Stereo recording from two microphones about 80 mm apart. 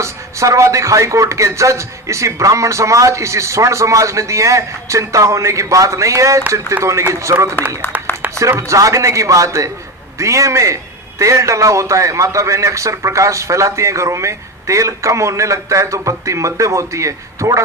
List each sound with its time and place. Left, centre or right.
0.0 s a man's voice: right
8.4 s a man's voice: right